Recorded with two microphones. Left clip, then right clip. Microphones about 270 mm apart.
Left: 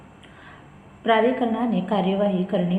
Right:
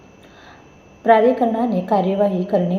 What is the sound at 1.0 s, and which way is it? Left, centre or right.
A woman's voice, centre.